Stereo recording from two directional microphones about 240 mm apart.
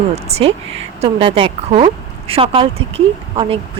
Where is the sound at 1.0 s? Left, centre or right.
Right.